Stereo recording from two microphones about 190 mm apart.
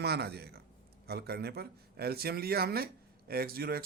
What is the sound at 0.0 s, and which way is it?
Speech, 55° right (ahead or behind).